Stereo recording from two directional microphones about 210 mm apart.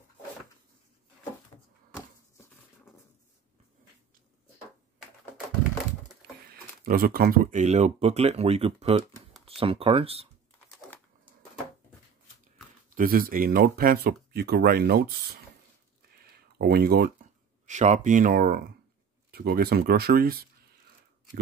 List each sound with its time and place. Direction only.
6.5 s speech: 45° right (ahead or behind); by 10.2 s 25° right (ahead or behind)
12.9 s speech: 45° right (ahead or behind)
16.5 s speech: 45° right (ahead or behind)
17.6 s speech: 35° right (ahead or behind)